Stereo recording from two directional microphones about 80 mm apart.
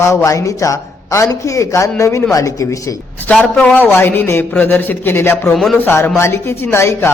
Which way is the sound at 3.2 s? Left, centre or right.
Centre.